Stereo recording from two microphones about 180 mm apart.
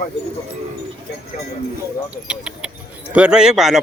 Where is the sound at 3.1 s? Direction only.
5° right (ahead or behind).